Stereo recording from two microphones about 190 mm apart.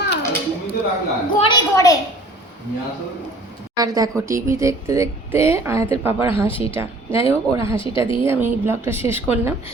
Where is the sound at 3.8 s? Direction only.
20° right (ahead or behind).